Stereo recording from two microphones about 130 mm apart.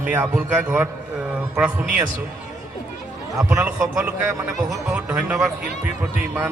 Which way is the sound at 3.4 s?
5° right (ahead or behind).